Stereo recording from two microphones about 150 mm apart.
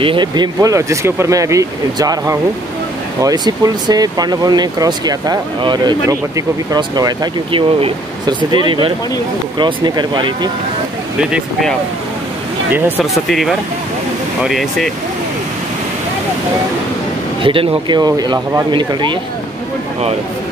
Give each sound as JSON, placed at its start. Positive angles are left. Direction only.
{"t": 0.0, "sound": "speech", "side_deg": -35}
{"t": 13.0, "sound": "speech", "side_deg": 0}
{"t": 17.4, "sound": "speech", "side_deg": -35}